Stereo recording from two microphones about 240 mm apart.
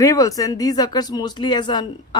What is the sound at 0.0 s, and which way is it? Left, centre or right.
Speech, centre.